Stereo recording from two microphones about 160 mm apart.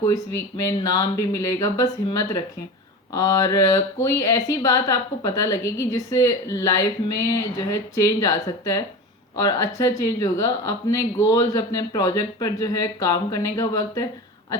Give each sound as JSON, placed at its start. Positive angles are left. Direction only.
{"t": 0.1, "sound": "speech", "side_deg": 25}